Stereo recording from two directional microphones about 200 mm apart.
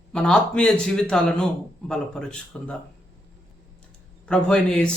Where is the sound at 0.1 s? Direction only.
5° left (ahead or behind).